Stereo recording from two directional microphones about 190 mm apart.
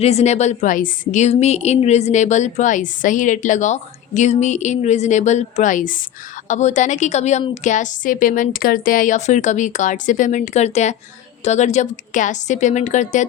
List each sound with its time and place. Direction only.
0.0 s a woman's voice: 35° left (ahead or behind)